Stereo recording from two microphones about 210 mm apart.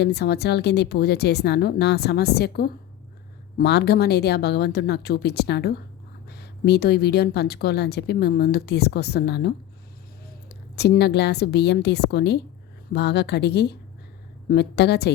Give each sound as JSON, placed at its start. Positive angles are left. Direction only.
{"t": 0.0, "sound": "speech", "side_deg": 50}
{"t": 10.8, "sound": "speech", "side_deg": 50}